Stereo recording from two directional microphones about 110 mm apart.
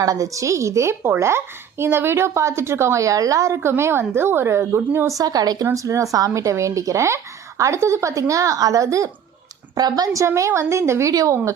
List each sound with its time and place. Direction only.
0.0 s a woman's voice: 30° right (ahead or behind)